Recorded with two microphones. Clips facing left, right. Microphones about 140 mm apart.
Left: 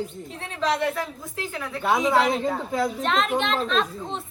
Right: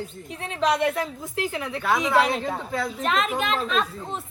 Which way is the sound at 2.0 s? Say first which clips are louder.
Even; 20° left (ahead or behind).